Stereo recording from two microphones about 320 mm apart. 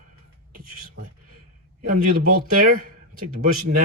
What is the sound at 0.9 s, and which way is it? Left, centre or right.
Speech, right.